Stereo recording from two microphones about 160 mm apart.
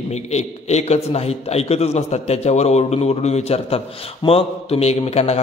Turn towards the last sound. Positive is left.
turn(degrees=40)  # may be behind; listen again after turning